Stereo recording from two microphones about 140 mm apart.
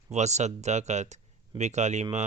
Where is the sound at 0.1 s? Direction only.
55° right (ahead or behind).